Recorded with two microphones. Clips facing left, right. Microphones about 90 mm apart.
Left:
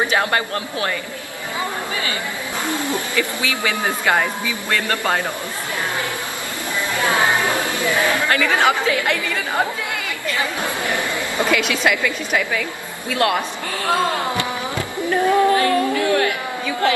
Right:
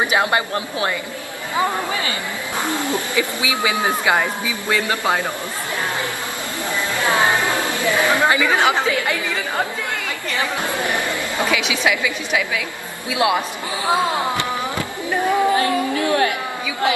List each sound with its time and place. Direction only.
0.0 s speech: 15° right (ahead or behind)
2.6 s a man's voice: 20° right (ahead or behind)
7.0 s music: 20° right (ahead or behind)
7.6 s a man's voice: 20° right (ahead or behind)
10.8 s a sound: 20° right (ahead or behind)
11.5 s a woman's voice: 5° right (ahead or behind)
15.9 s chatter: 30° right (ahead or behind)